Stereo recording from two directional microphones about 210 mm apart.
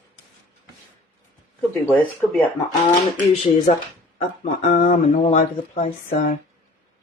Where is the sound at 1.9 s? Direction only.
10° left (ahead or behind).